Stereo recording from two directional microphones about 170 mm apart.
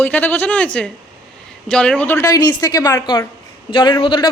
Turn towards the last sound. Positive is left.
turn(degrees=25)  # may be behind; listen again after turning